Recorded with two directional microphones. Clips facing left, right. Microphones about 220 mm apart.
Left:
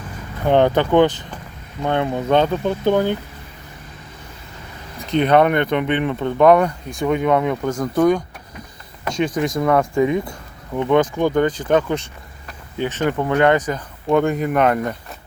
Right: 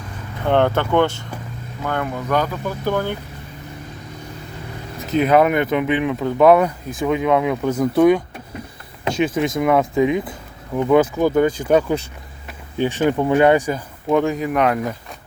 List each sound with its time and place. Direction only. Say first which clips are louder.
0.4 s speech: left 2 dB; 15° left (ahead or behind)
4.9 s speech: even; 5° right (ahead or behind)